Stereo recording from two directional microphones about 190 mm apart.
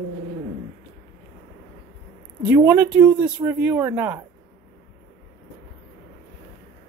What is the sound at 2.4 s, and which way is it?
A woman's voice, 10° right (ahead or behind).